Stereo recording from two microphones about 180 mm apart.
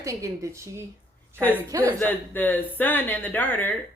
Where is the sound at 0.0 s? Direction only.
15° right (ahead or behind).